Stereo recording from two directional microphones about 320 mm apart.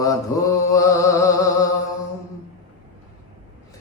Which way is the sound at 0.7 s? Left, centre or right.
Centre.